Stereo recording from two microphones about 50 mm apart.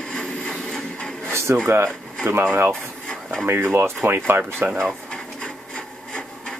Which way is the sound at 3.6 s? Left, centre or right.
Right.